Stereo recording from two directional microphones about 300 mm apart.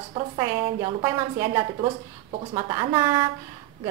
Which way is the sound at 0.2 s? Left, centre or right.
Centre.